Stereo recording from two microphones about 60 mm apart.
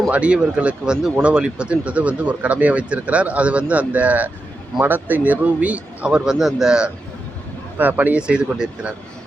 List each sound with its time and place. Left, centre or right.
0.1 s speech: centre
6.1 s a man's voice: centre
7.8 s speech: right
8.3 s a man's voice: centre